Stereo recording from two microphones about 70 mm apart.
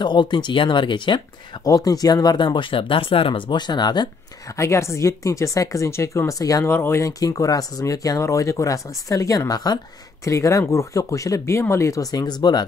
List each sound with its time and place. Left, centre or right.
0.0 s speech: left
4.6 s speech: left
6.6 s speech: left
7.1 s speech: left
10.2 s speech: left